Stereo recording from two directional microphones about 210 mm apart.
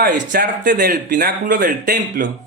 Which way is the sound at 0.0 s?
40° right (ahead or behind).